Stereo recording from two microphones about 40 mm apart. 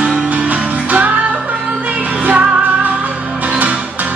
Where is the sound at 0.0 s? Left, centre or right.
Right.